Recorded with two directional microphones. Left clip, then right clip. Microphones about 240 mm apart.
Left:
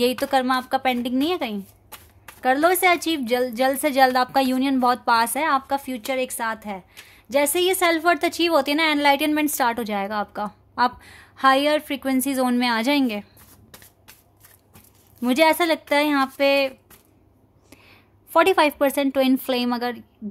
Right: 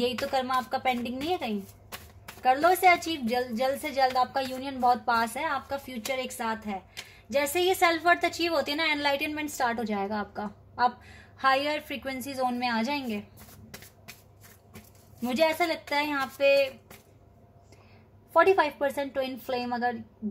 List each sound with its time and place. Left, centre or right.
0.0 s a woman's voice: left
15.2 s a woman's voice: left
18.3 s a woman's voice: left